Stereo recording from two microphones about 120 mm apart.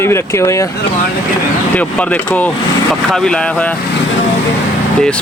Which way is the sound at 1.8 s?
15° left (ahead or behind).